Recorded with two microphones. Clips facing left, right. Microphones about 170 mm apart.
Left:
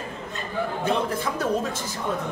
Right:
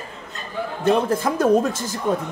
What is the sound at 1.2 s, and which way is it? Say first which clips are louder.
Speech: right 8 dB; 90° right.